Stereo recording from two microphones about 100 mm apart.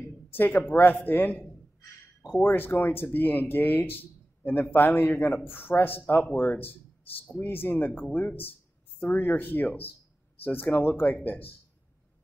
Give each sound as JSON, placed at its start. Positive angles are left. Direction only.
{"t": 0.3, "sound": "speech", "side_deg": 20}